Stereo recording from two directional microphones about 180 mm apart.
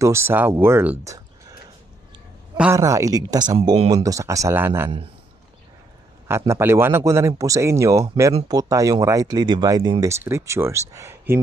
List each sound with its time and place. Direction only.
0.0 s speech: 15° right (ahead or behind)
2.5 s a man's voice: 5° right (ahead or behind)
2.8 s speech: 20° right (ahead or behind)
3.9 s speech: 20° right (ahead or behind)
6.2 s speech: 15° right (ahead or behind)